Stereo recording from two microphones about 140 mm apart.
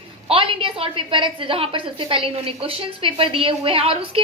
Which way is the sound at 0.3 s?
40° right (ahead or behind).